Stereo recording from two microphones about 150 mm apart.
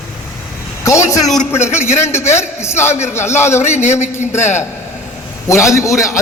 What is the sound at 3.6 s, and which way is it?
A man's voice, 50° left (ahead or behind).